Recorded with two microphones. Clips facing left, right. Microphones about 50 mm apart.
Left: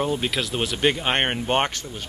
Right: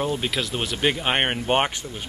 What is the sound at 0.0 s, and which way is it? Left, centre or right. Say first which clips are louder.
Speech: left 1 dB; centre.